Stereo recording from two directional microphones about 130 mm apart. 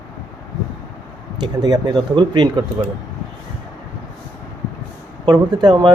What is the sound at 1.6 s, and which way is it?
Speech, 30° right (ahead or behind).